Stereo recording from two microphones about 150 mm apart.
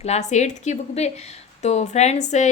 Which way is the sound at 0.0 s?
50° left (ahead or behind).